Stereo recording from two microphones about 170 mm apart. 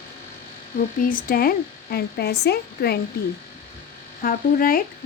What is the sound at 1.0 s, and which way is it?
Speech, 55° left (ahead or behind).